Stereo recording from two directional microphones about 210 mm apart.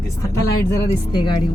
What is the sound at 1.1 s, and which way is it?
Speech, 20° left (ahead or behind).